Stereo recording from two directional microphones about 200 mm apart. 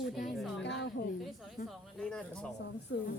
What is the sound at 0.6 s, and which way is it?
Speech, 60° left (ahead or behind).